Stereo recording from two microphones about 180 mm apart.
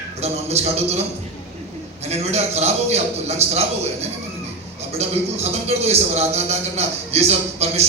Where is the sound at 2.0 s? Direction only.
35° right (ahead or behind).